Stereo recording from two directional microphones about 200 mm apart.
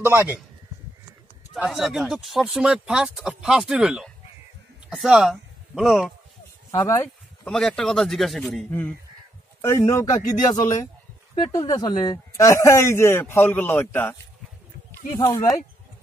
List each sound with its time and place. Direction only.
0.0 s a man's voice: 10° right (ahead or behind)
1.5 s speech: centre (ahead or behind)
6.7 s a man's voice: 15° left (ahead or behind)
7.4 s a man's voice: 5° left (ahead or behind)
15.1 s speech: 20° left (ahead or behind)